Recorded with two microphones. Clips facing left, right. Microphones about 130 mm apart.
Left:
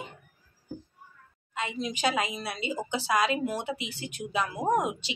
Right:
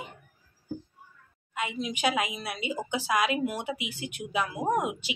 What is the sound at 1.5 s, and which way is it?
Speech, 10° right (ahead or behind).